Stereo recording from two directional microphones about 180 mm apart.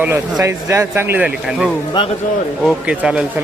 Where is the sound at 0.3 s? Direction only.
15° right (ahead or behind).